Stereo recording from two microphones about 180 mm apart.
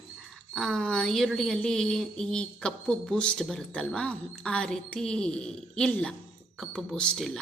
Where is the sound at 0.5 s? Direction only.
5° left (ahead or behind).